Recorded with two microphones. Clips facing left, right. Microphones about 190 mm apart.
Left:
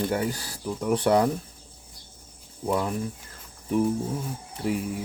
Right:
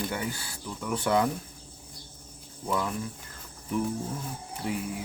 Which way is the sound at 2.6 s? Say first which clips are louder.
Left 4 dB; 35° left (ahead or behind).